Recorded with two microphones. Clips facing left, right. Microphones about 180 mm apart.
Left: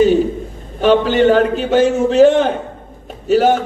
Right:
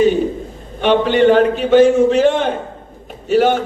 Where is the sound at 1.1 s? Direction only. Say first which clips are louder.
Right 1 dB; 40° left (ahead or behind).